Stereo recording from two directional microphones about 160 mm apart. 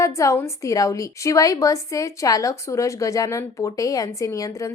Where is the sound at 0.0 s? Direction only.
20° left (ahead or behind).